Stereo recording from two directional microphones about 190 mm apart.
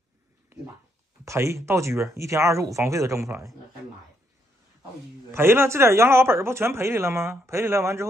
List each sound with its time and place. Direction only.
1.2 s speech: 15° right (ahead or behind)
5.3 s speech: 10° right (ahead or behind)